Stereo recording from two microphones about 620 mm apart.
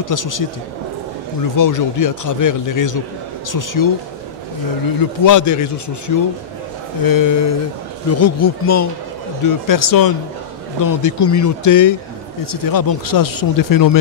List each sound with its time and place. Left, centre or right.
0.0 s speech: left
1.6 s speech: left
5.2 s speech: left